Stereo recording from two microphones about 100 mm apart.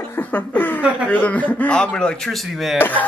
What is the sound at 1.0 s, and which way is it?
Speech, 15° left (ahead or behind).